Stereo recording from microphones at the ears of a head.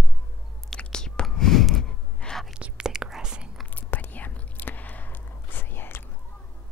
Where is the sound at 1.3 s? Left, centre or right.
Left.